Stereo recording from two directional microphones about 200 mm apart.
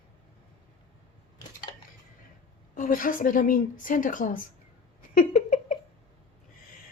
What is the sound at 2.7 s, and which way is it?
A woman's voice, 40° left (ahead or behind).